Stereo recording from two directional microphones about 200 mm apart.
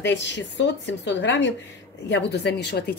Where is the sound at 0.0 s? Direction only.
65° left (ahead or behind).